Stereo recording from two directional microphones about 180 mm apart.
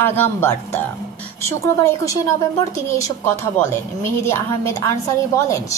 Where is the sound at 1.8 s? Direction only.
15° left (ahead or behind).